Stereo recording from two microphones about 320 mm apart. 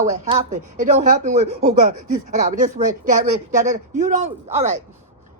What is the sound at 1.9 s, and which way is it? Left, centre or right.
Speech, right.